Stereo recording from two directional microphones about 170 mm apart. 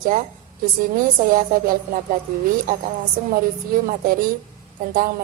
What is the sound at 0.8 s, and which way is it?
A woman's voice, 55° right (ahead or behind).